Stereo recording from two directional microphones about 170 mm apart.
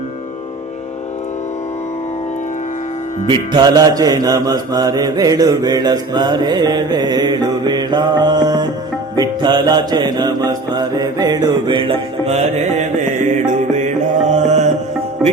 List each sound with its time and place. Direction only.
3.2 s mantra: 25° right (ahead or behind); by 13.9 s 45° right (ahead or behind)
14.3 s music: 45° right (ahead or behind)